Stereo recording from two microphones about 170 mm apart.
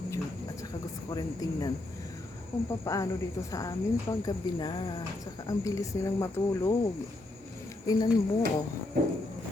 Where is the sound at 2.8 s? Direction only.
20° left (ahead or behind).